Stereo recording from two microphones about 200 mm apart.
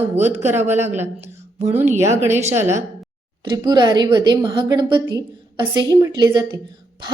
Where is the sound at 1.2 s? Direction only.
35° right (ahead or behind).